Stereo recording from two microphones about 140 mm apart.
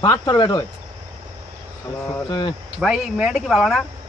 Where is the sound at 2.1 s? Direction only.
35° left (ahead or behind).